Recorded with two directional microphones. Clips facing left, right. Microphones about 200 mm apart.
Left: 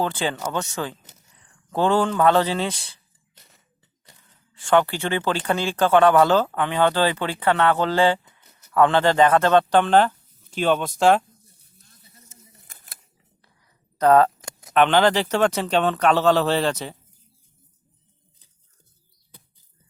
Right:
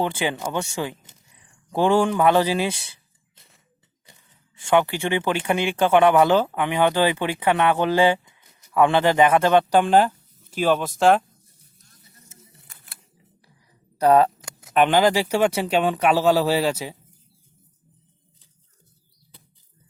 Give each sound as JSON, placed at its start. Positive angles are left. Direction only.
{"t": 0.0, "sound": "speech", "side_deg": -15}
{"t": 4.7, "sound": "speech", "side_deg": -15}
{"t": 12.7, "sound": "camera", "side_deg": 40}
{"t": 14.0, "sound": "speech", "side_deg": -10}